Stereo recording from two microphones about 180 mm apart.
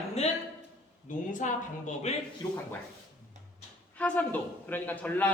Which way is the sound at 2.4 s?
20° left (ahead or behind).